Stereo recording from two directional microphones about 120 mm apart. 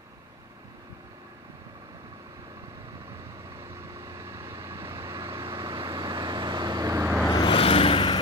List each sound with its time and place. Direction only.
3.7 s vehicle: 25° right (ahead or behind)
5.3 s vehicle: 40° right (ahead or behind); by 7.2 s 20° right (ahead or behind)
7.2 s vehicle: 40° left (ahead or behind)